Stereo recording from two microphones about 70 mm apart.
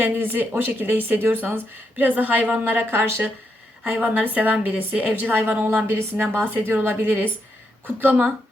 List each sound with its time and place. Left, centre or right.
0.0 s a woman's voice: right